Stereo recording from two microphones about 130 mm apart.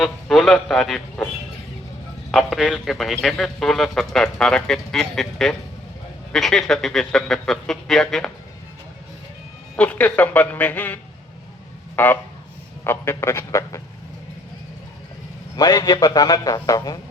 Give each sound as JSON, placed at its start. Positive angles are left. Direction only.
{"t": 0.0, "sound": "a man's voice", "side_deg": 0}
{"t": 2.3, "sound": "a man's voice", "side_deg": 0}
{"t": 9.7, "sound": "a man's voice", "side_deg": 10}
{"t": 15.5, "sound": "a man's voice", "side_deg": 30}